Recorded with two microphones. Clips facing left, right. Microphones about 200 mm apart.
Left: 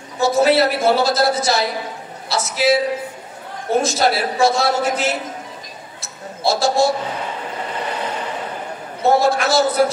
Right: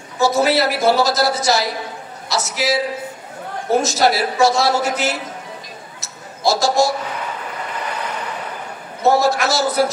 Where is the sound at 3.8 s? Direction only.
30° left (ahead or behind).